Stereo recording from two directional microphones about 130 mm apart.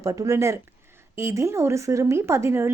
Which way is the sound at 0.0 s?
25° right (ahead or behind).